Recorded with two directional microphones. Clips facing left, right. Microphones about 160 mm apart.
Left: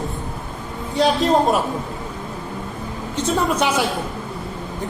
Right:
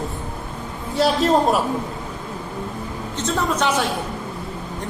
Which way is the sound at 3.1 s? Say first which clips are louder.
Left 3 dB; 10° left (ahead or behind).